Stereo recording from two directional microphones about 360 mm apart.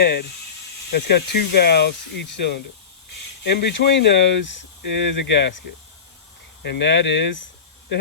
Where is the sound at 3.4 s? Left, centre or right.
Left.